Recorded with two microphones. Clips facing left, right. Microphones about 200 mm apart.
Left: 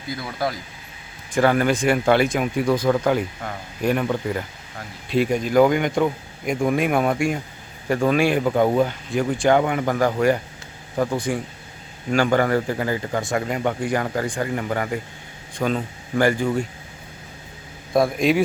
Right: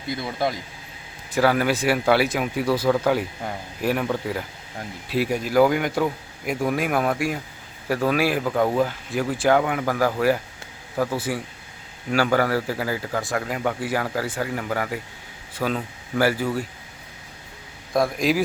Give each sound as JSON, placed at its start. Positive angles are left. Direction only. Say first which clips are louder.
{"t": 0.2, "sound": "speech", "louder": "right 1 dB", "side_deg": -25}
{"t": 1.3, "sound": "speech", "louder": "left 2 dB", "side_deg": -5}
{"t": 10.9, "sound": "a man's voice", "louder": "left 2 dB", "side_deg": 15}
{"t": 12.1, "sound": "speech", "louder": "left 2 dB", "side_deg": -5}
{"t": 17.9, "sound": "speech", "louder": "left 3 dB", "side_deg": 0}